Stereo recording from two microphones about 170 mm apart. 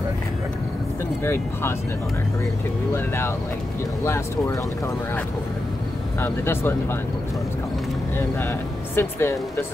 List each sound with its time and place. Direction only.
1.2 s speech: 15° left (ahead or behind)
4.0 s speech: 15° left (ahead or behind)
6.2 s speech: 15° left (ahead or behind)
8.9 s speech: 15° left (ahead or behind)